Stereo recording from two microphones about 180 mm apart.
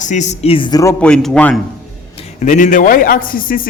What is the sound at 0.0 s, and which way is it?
Speech, 40° left (ahead or behind).